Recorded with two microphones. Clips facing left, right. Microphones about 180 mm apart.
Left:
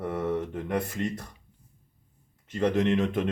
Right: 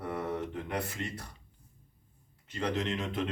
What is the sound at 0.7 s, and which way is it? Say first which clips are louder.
Speech: left 8 dB; 50° left (ahead or behind).